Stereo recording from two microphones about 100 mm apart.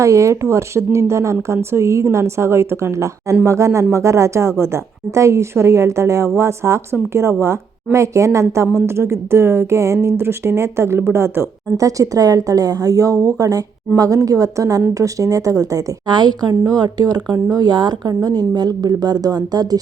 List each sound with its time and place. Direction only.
0.0 s a woman's voice: 30° right (ahead or behind)